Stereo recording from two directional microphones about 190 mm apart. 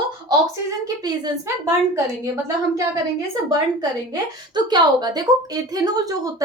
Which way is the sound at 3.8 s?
20° right (ahead or behind).